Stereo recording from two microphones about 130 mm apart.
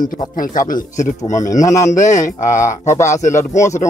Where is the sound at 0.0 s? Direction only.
90° left.